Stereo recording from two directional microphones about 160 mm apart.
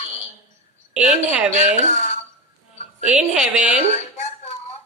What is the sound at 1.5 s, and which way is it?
Speech, 45° right (ahead or behind).